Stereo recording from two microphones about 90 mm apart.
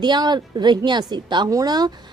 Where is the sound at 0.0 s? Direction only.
55° right (ahead or behind).